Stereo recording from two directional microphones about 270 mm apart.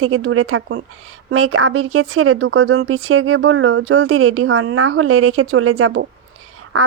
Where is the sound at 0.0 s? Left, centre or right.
Right.